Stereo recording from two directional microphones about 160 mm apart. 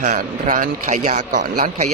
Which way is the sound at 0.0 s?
50° right (ahead or behind).